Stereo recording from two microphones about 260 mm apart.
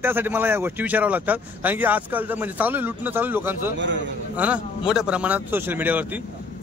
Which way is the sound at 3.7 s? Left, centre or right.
Right.